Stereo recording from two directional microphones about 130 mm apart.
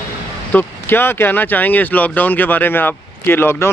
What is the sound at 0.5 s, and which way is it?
Speech, 15° left (ahead or behind).